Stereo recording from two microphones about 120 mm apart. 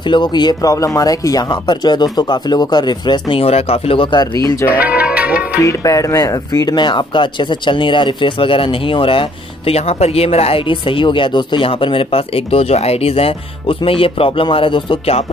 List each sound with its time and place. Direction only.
0.1 s speech: 40° left (ahead or behind)
4.7 s music: 10° right (ahead or behind)
5.6 s speech: 25° left (ahead or behind); by 9.2 s 45° left (ahead or behind)
9.7 s speech: 60° left (ahead or behind)